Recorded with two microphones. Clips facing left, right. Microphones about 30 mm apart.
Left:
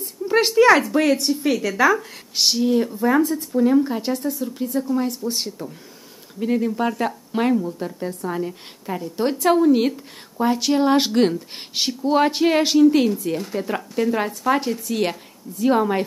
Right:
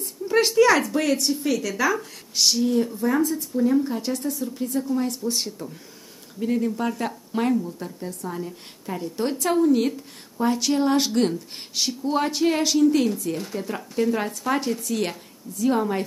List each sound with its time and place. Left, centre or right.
0.0 s a woman's voice: centre; by 3.4 s left
3.5 s a woman's voice: left
8.1 s a woman's voice: left
8.4 s a woman's voice: left
15.5 s a woman's voice: left